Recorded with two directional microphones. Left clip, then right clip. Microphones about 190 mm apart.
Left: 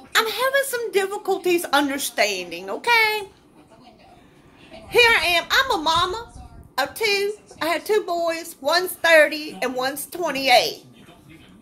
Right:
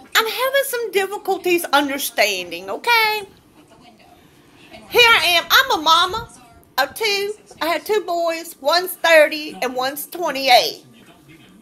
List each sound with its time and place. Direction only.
0.1 s a woman's voice: 10° left (ahead or behind)
4.8 s a woman's voice: 15° left (ahead or behind)